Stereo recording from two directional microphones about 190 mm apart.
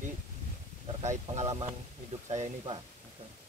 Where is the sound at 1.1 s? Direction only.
35° right (ahead or behind).